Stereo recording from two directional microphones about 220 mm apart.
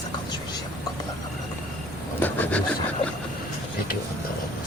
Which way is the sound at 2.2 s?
5° left (ahead or behind).